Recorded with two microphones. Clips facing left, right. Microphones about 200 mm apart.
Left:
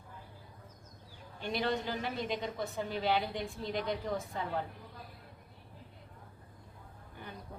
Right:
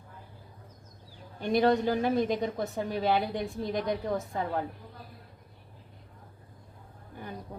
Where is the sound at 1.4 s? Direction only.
45° right (ahead or behind).